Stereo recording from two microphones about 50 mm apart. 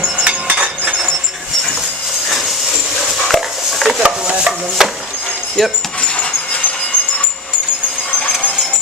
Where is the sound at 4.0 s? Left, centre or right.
Centre.